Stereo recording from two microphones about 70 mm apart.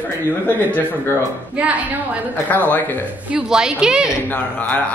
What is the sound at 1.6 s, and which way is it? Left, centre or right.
Speech, right.